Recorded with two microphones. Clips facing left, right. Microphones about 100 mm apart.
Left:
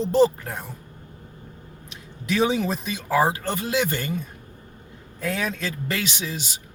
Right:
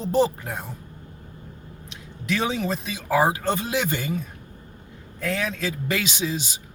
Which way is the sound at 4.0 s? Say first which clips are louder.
Right 1 dB; 5° right (ahead or behind).